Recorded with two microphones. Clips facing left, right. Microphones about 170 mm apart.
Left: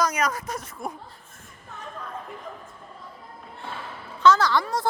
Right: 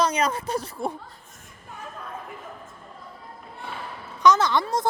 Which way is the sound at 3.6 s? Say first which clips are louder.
Right 1 dB; 15° right (ahead or behind).